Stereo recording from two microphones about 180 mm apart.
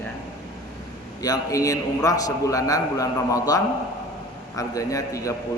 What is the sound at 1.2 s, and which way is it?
A man's voice, 20° left (ahead or behind).